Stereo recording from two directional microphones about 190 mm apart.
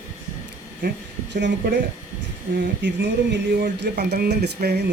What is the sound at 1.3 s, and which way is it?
Speech, 65° right (ahead or behind).